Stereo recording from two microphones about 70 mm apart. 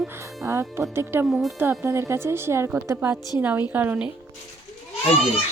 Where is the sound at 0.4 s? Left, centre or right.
Right.